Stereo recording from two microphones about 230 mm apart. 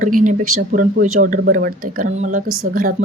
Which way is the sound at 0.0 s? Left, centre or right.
Right.